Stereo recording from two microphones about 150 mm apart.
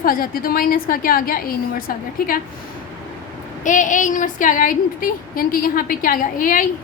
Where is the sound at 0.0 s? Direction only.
70° left (ahead or behind).